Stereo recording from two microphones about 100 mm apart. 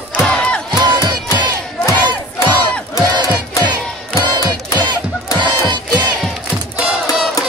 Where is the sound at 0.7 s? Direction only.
50° right (ahead or behind).